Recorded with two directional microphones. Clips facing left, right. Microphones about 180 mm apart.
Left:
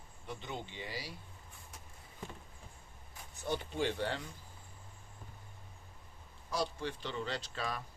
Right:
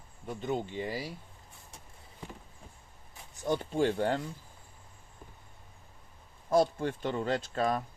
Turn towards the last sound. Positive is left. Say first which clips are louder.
# right 10 dB
turn(degrees=-50)  # may be behind; listen again after turning